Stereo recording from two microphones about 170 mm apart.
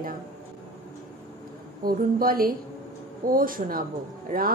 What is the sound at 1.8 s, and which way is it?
A woman's voice, 60° right (ahead or behind).